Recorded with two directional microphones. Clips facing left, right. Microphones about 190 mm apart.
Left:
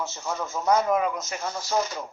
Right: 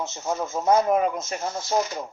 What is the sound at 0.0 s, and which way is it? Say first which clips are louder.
Speech: right 3 dB; 25° right (ahead or behind).